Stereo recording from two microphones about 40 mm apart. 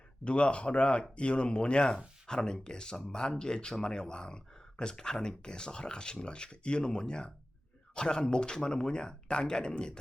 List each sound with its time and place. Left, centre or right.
0.3 s speech: left